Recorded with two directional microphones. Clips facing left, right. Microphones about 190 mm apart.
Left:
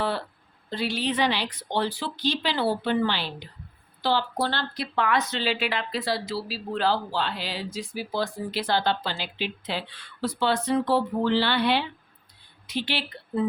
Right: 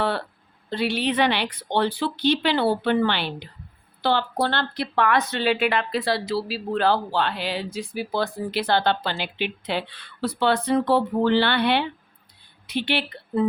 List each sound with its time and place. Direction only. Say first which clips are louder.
0.7 s a woman's voice: right 4 dB; 60° right (ahead or behind)